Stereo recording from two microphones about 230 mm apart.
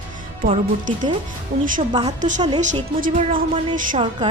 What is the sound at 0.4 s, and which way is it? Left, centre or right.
Speech, right.